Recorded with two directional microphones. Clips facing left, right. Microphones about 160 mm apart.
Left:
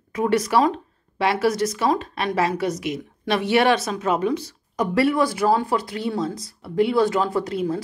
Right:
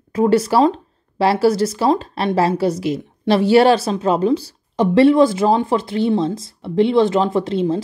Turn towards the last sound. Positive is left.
turn(degrees=-25)  # may be behind; listen again after turning